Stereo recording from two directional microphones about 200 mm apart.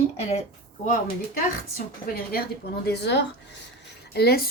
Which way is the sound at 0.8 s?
40° left (ahead or behind).